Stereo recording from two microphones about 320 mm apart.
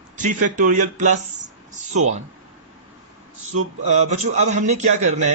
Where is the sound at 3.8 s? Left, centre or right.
Right.